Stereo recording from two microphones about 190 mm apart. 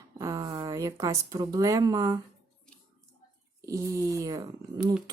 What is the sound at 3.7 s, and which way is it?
Speech, 15° right (ahead or behind).